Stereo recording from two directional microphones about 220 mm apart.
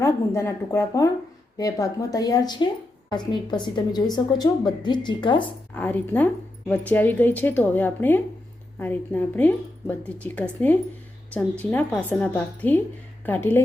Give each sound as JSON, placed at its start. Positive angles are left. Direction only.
{"t": 0.0, "sound": "a woman's voice", "side_deg": 15}
{"t": 5.7, "sound": "speech", "side_deg": 10}